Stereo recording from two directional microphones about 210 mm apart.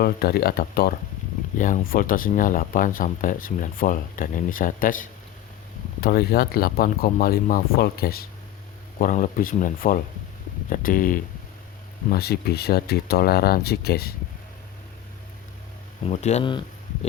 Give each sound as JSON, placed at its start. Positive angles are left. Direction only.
{"t": 0.0, "sound": "speech", "side_deg": 45}
{"t": 16.0, "sound": "speech", "side_deg": 35}
{"t": 16.5, "sound": "a sound", "side_deg": 20}